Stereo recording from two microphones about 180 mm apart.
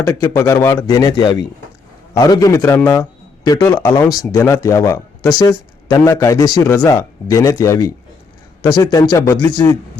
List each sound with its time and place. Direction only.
0.0 s a man's voice: 15° left (ahead or behind)